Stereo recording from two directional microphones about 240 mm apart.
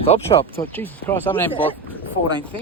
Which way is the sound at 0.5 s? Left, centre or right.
Centre.